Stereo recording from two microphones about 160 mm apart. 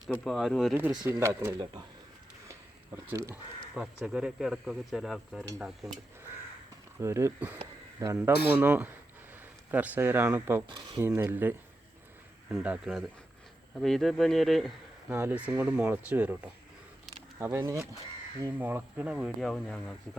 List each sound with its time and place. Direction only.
0.1 s speech: centre (ahead or behind)
0.7 s speech: 15° right (ahead or behind)
2.5 s a sound: 15° right (ahead or behind)
3.8 s speech: 5° right (ahead or behind)
7.0 s speech: 15° right (ahead or behind)
10.7 s speech: 30° right (ahead or behind)
11.0 s speech: 15° right (ahead or behind)
15.1 s speech: 10° right (ahead or behind); by 20.0 s 5° left (ahead or behind)